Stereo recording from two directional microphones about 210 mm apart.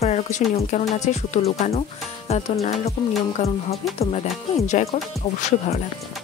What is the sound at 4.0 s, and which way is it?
Speech, 30° left (ahead or behind).